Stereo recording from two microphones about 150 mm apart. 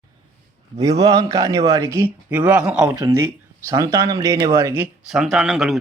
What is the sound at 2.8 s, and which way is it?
A man's voice, 20° right (ahead or behind).